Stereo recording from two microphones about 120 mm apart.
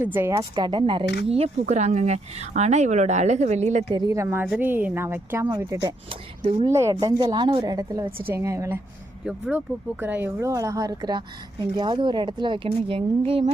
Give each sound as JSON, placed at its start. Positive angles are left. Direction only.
{"t": 0.0, "sound": "speech", "side_deg": -20}
{"t": 3.9, "sound": "a woman's voice", "side_deg": -30}
{"t": 8.2, "sound": "speech", "side_deg": -20}
{"t": 9.2, "sound": "speech", "side_deg": -15}